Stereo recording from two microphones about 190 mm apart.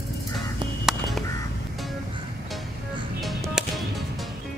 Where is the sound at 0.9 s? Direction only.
Centre (ahead or behind).